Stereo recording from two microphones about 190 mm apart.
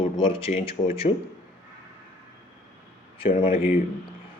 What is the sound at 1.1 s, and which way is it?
Speech, 30° left (ahead or behind).